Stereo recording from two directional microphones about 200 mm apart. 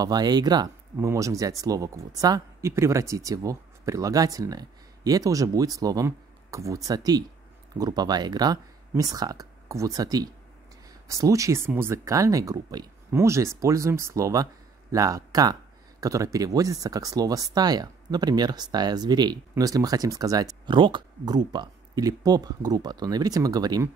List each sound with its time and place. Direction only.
0.0 s speech: 20° right (ahead or behind)